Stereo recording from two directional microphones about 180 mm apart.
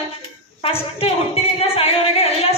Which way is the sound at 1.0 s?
35° left (ahead or behind).